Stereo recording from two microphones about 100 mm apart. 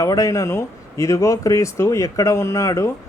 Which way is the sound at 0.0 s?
35° left (ahead or behind).